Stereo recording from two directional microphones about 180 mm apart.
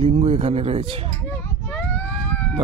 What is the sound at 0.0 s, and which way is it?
Speech, 35° right (ahead or behind).